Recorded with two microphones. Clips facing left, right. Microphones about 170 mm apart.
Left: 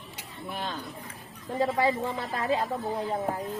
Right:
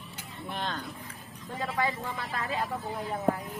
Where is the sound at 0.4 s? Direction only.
5° left (ahead or behind).